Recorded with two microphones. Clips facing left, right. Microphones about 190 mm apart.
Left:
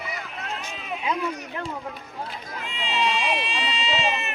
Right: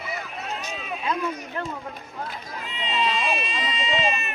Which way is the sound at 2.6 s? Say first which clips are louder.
Even; 80° left.